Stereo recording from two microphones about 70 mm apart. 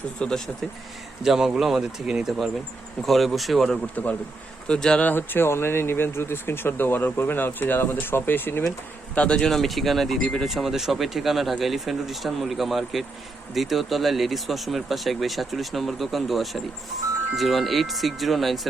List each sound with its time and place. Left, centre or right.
0.2 s speech: centre
1.2 s speech: centre
3.9 s speech: left
4.7 s speech: centre
5.0 s speech: left
9.1 s speech: centre
9.5 s speech: centre